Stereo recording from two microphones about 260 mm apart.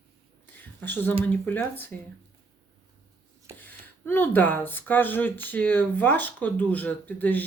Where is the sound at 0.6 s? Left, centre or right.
Centre.